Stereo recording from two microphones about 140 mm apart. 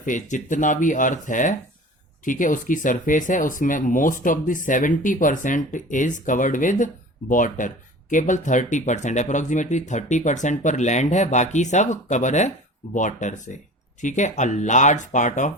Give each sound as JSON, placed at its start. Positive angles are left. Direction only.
{"t": 0.0, "sound": "speech", "side_deg": 65}